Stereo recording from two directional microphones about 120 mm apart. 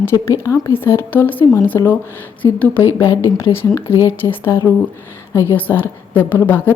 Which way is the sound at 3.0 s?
25° left (ahead or behind).